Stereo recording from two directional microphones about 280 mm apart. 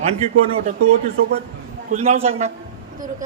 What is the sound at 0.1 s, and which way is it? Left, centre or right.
A man's voice, right.